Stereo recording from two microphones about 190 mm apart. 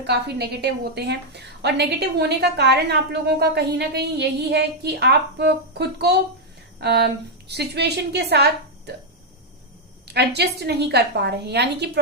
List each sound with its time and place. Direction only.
0.0 s a woman's voice: 60° right (ahead or behind)
10.1 s a woman's voice: 60° right (ahead or behind)